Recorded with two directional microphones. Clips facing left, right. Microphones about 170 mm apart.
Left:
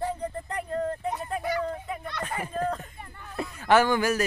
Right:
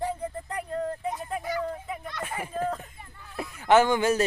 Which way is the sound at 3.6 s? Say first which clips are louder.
Right 1 dB; 20° right (ahead or behind).